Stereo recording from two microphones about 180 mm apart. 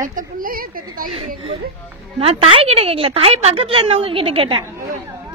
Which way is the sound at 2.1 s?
30° right (ahead or behind).